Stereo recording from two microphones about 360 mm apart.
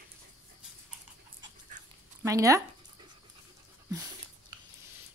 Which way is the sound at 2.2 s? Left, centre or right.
Centre.